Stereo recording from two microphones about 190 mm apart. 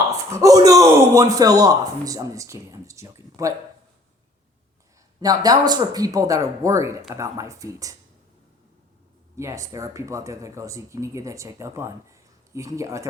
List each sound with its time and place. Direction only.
0.0 s a man's voice: 15° right (ahead or behind)
5.2 s speech: 20° right (ahead or behind)
9.3 s speech: 15° right (ahead or behind)